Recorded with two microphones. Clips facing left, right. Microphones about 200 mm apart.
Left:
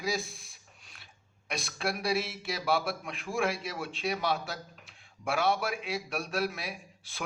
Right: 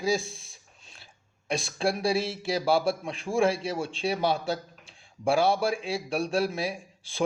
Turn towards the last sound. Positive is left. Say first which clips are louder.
# right 6 dB
turn(degrees=-30)  # may be behind; listen again after turning